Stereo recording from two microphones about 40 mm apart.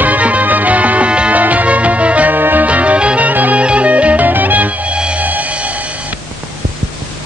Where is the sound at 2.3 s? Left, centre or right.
Right.